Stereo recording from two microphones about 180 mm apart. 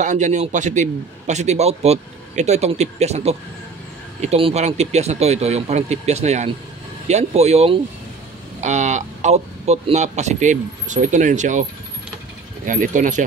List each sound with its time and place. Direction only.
0.0 s a man's voice: 45° right (ahead or behind)
12.6 s speech: 50° right (ahead or behind)